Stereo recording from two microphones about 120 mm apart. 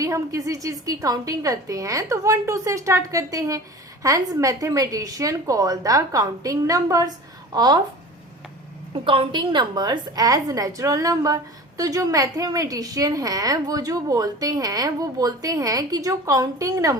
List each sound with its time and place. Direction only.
0.0 s a woman's voice: 25° right (ahead or behind)
9.0 s a woman's voice: 45° right (ahead or behind)